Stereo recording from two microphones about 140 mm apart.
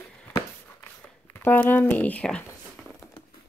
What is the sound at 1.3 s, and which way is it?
Speech, 15° left (ahead or behind).